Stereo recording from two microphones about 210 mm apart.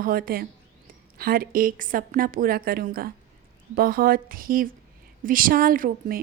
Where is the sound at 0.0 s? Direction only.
45° right (ahead or behind).